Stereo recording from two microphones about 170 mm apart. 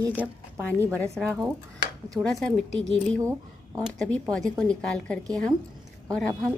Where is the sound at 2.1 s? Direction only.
Centre (ahead or behind).